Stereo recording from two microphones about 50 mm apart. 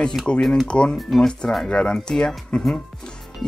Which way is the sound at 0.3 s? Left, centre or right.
Centre.